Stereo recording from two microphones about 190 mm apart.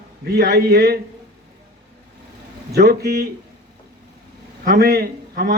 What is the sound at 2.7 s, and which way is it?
Speech, 55° right (ahead or behind).